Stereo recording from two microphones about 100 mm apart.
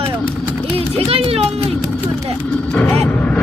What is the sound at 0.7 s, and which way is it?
Run, 75° right (ahead or behind).